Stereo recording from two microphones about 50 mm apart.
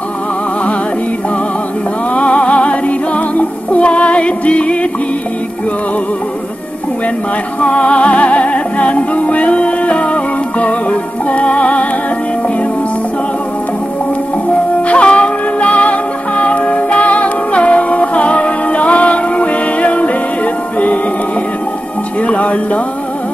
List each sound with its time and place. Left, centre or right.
2.1 s music: left
7.6 s music: left
14.5 s music: left
22.2 s music: left